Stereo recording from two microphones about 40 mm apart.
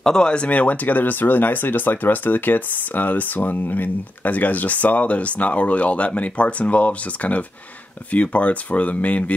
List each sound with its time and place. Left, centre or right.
0.0 s speech: centre
0.5 s speech: left